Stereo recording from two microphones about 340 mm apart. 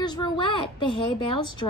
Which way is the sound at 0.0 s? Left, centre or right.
Centre.